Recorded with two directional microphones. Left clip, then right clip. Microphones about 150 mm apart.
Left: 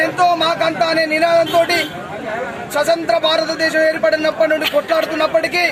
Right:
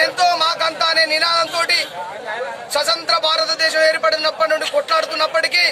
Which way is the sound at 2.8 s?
35° right (ahead or behind).